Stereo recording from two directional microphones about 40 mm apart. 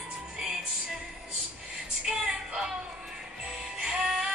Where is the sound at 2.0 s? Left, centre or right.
Centre.